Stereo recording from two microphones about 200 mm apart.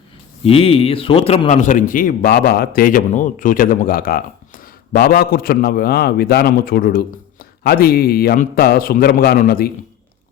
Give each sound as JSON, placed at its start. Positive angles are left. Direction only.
{"t": 0.4, "sound": "a man's voice", "side_deg": 30}